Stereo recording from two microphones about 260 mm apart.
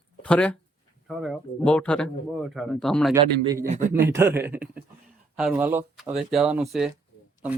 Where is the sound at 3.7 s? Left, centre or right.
Right.